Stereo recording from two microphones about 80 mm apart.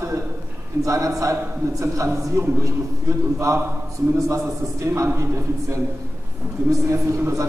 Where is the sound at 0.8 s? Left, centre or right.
Right.